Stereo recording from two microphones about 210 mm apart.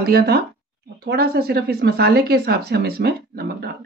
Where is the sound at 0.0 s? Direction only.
45° right (ahead or behind).